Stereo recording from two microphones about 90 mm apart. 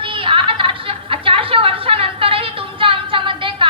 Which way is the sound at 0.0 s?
70° right (ahead or behind).